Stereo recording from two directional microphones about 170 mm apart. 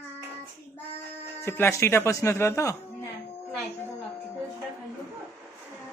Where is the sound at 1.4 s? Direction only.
15° left (ahead or behind).